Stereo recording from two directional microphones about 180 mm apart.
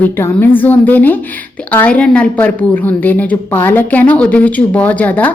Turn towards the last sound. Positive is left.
turn(degrees=10)  # may be behind; listen again after turning